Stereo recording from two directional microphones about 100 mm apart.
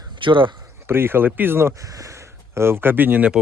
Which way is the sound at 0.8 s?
20° right (ahead or behind).